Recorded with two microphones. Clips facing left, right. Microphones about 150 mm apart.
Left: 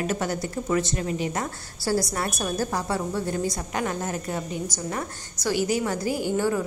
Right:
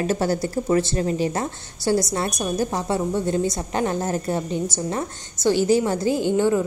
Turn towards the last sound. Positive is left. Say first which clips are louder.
# right 5 dB
turn(degrees=-20)  # may be behind; listen again after turning